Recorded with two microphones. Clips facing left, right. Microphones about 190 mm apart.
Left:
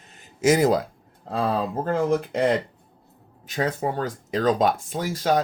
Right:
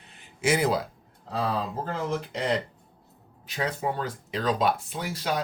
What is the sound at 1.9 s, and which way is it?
Speech, 50° left (ahead or behind).